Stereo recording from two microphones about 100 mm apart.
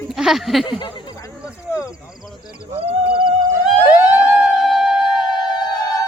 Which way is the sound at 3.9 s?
15° right (ahead or behind).